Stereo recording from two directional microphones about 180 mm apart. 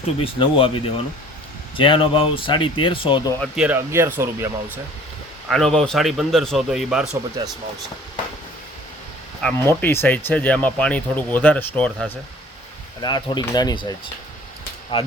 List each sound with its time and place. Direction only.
0.3 s speech: 30° left (ahead or behind)
3.4 s speech: 5° right (ahead or behind)
5.5 s speech: centre (ahead or behind)
7.4 s speech: 20° right (ahead or behind)
9.4 s speech: 10° left (ahead or behind)
13.0 s speech: 25° left (ahead or behind)
14.9 s speech: 35° left (ahead or behind)